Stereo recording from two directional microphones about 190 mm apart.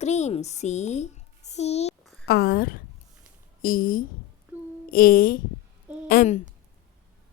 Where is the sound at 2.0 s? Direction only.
Centre (ahead or behind).